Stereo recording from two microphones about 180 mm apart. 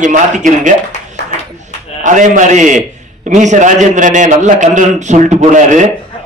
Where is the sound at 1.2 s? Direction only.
70° left (ahead or behind).